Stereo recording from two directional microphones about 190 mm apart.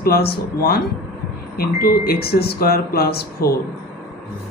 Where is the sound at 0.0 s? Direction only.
55° left (ahead or behind).